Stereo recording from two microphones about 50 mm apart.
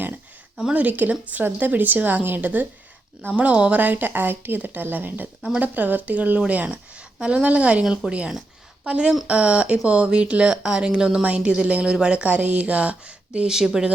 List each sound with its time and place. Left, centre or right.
0.7 s a woman's voice: right
10.5 s speech: centre
13.5 s speech: centre